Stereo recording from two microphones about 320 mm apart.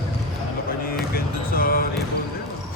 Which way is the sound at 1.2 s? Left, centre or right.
Left.